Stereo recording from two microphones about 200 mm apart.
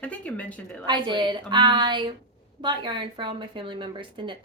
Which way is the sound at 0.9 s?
20° right (ahead or behind).